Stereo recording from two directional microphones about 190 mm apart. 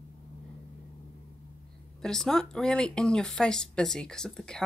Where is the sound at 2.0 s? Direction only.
Centre (ahead or behind).